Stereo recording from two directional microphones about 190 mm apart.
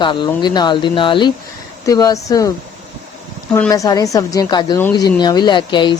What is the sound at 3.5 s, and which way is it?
A woman's voice, 15° left (ahead or behind).